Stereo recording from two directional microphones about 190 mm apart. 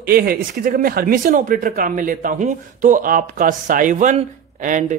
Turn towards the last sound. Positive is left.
turn(degrees=-40)  # may be behind; listen again after turning